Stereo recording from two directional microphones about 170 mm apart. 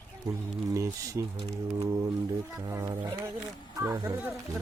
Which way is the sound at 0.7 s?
15° right (ahead or behind).